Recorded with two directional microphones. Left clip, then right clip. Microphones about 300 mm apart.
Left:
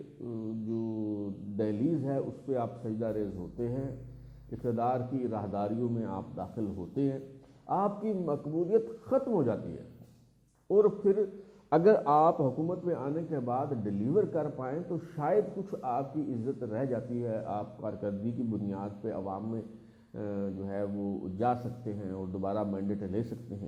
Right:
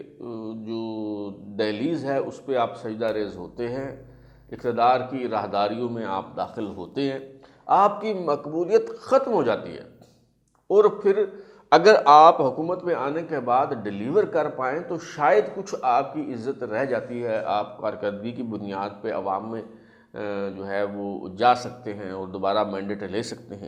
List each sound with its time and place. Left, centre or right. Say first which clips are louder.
0.3 s mantra: right 4 dB; right
1.5 s speech: right 6 dB; centre
12.5 s speech: right 8 dB; centre
22.4 s speech: right 11 dB; centre